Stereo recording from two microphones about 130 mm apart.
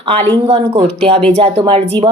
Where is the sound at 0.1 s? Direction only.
50° right (ahead or behind).